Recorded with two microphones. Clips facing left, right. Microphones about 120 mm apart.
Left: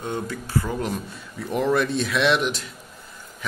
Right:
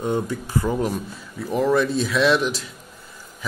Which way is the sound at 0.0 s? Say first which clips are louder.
Right 5 dB; 15° right (ahead or behind).